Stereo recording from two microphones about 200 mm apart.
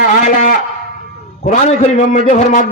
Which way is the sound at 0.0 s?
45° left (ahead or behind).